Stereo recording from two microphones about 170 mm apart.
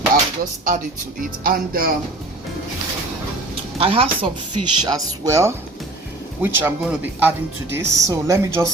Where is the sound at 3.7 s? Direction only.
35° right (ahead or behind).